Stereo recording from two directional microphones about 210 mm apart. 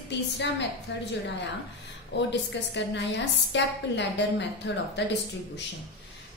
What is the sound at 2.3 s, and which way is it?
A woman's voice, 55° left (ahead or behind).